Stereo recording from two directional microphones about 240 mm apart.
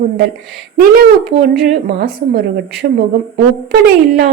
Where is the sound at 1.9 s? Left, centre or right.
Right.